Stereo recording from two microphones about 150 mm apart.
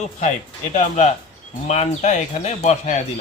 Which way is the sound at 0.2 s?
50° left (ahead or behind).